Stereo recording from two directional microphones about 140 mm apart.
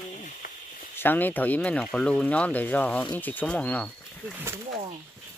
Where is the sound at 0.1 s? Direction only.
60° left (ahead or behind).